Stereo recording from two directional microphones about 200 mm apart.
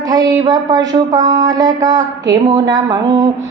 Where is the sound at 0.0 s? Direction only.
20° right (ahead or behind).